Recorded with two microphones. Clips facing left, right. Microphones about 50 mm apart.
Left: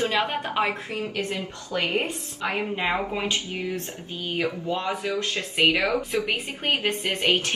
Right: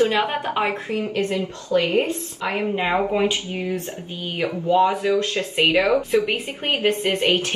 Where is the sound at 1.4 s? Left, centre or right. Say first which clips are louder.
Right 7 dB; left.